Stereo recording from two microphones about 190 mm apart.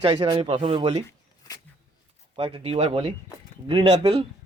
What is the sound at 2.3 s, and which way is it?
Speech, 30° right (ahead or behind).